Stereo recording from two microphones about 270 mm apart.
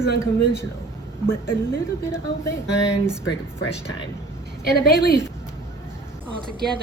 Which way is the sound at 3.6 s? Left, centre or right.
Left.